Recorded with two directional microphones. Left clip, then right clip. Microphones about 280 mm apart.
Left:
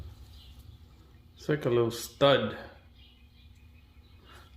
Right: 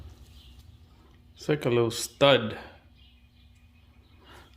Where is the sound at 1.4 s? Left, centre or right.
Right.